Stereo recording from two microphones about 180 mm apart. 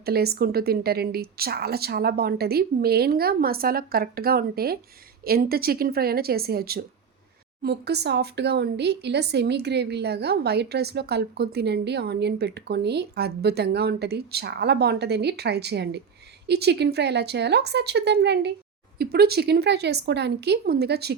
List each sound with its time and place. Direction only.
0.0 s speech: 60° right (ahead or behind)